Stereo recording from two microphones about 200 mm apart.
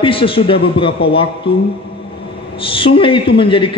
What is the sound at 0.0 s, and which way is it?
A man's voice, 25° left (ahead or behind).